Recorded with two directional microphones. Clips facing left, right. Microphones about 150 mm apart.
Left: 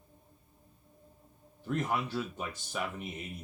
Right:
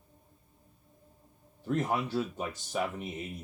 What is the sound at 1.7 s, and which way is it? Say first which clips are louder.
Speech: right 3 dB; 35° right (ahead or behind).